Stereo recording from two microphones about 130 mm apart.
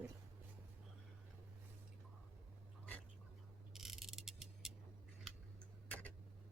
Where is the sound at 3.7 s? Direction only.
Centre (ahead or behind).